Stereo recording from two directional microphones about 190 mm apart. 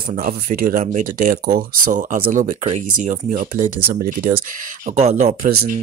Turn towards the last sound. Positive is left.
turn(degrees=-40)  # may be behind; listen again after turning